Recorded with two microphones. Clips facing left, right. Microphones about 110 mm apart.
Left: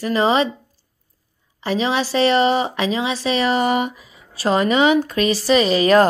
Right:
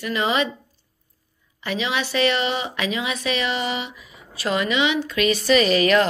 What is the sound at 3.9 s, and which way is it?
A woman's voice, 30° left (ahead or behind).